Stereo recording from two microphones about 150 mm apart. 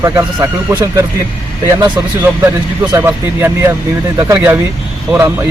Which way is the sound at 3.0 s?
15° right (ahead or behind).